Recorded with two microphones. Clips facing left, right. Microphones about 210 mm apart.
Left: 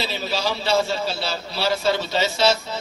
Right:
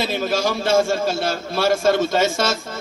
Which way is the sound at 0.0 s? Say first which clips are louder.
Right 5 dB; 50° right (ahead or behind).